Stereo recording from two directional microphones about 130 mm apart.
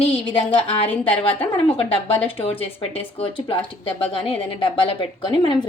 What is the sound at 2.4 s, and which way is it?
A woman's voice, 45° left (ahead or behind).